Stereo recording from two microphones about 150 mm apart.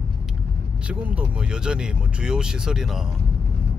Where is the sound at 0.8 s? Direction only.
10° right (ahead or behind).